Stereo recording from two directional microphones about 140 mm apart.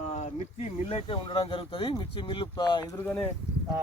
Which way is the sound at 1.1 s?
40° left (ahead or behind).